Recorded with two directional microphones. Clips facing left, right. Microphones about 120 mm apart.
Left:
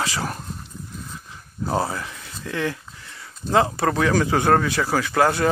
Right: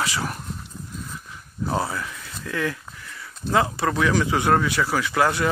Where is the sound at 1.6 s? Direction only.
35° left (ahead or behind).